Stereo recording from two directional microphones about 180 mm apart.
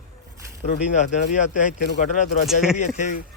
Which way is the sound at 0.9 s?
40° left (ahead or behind).